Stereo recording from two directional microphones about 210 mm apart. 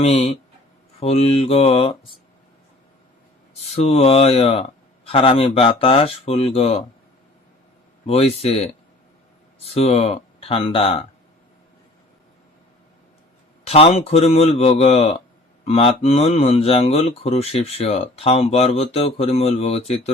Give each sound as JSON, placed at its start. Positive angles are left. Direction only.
{"t": 0.0, "sound": "speech", "side_deg": 30}
{"t": 3.5, "sound": "speech", "side_deg": 30}
{"t": 8.0, "sound": "speech", "side_deg": 30}
{"t": 9.6, "sound": "speech", "side_deg": 30}
{"t": 13.7, "sound": "speech", "side_deg": 30}